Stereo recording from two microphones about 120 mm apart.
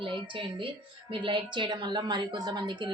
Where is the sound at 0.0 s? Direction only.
45° right (ahead or behind).